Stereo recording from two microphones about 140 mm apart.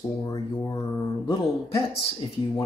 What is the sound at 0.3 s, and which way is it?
Speech, 30° left (ahead or behind).